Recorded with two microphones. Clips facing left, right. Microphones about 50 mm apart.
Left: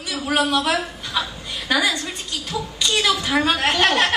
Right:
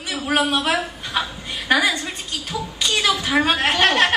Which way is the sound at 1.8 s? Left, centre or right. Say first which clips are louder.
Right 1 dB; centre.